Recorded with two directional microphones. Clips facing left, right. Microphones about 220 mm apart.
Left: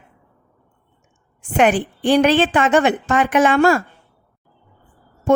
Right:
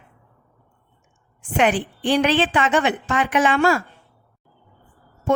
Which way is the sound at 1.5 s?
45° left (ahead or behind).